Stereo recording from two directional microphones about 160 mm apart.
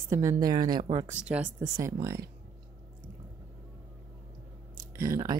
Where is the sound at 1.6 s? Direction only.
20° right (ahead or behind).